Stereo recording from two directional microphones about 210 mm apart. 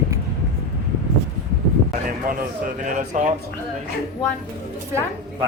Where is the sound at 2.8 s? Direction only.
35° right (ahead or behind).